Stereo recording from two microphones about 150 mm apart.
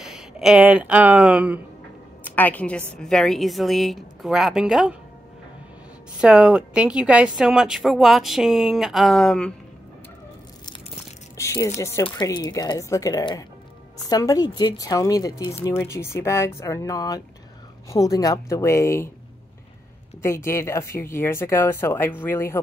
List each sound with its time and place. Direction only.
0.0 s speech: 5° right (ahead or behind)
2.2 s a woman's voice: 10° left (ahead or behind); by 4.9 s 5° right (ahead or behind)
6.2 s speech: 5° right (ahead or behind)
11.3 s speech: 20° left (ahead or behind)
20.2 s speech: 15° left (ahead or behind)